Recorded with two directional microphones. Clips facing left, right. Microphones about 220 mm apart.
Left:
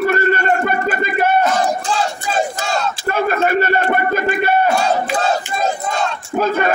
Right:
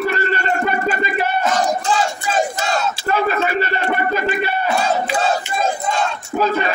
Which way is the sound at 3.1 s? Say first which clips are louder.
Left 3 dB; 50° left (ahead or behind).